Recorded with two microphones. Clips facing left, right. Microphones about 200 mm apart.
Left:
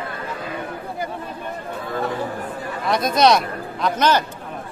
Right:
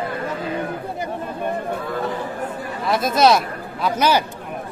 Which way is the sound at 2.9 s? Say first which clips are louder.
Even; 5° right (ahead or behind).